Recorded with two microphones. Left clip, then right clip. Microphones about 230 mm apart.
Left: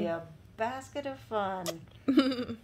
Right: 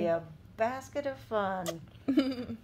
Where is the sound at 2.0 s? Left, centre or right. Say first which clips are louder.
Left 3 dB; left.